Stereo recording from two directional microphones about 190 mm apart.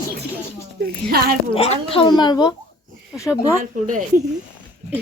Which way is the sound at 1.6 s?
30° left (ahead or behind).